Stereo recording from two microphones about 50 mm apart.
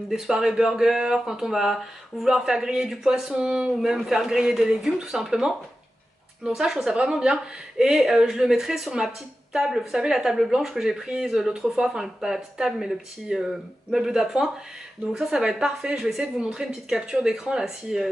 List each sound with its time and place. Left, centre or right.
0.1 s speech: centre